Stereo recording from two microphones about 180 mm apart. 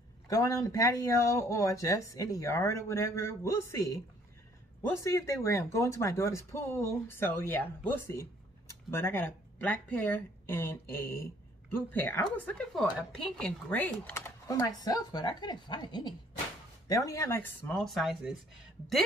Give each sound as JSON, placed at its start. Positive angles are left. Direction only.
{"t": 0.3, "sound": "speech", "side_deg": 20}
{"t": 5.0, "sound": "speech", "side_deg": 15}